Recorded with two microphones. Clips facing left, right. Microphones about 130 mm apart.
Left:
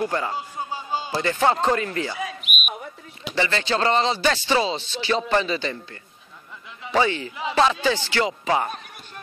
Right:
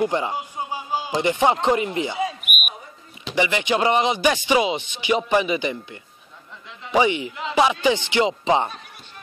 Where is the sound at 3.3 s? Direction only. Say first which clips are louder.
Right 2 dB; 15° right (ahead or behind).